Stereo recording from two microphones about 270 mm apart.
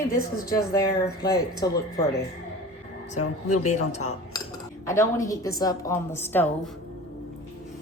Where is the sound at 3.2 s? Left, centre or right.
Left.